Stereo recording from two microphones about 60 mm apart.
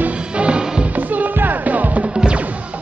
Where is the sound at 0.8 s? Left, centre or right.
Right.